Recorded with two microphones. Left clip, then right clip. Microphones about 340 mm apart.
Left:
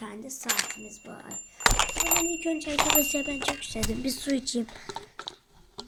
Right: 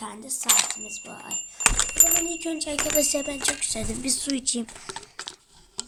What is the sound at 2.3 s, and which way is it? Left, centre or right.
Speech, centre.